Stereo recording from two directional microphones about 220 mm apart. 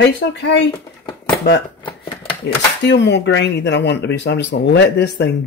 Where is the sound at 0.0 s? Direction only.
50° left (ahead or behind).